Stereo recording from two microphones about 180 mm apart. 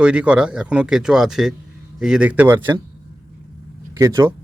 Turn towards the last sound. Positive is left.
turn(degrees=-20)  # may be behind; listen again after turning